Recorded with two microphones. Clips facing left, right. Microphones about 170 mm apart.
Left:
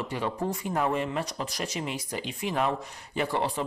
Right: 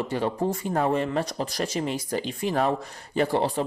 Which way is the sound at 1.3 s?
45° right (ahead or behind).